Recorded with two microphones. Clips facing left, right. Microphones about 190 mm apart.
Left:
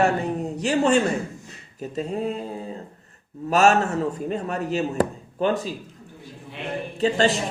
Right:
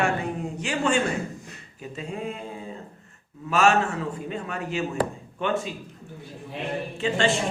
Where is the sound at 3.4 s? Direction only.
40° left (ahead or behind).